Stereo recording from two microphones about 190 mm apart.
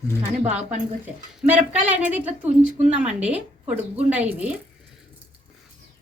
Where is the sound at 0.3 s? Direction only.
40° right (ahead or behind).